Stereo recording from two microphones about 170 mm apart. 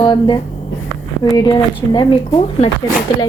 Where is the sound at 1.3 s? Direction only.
25° left (ahead or behind).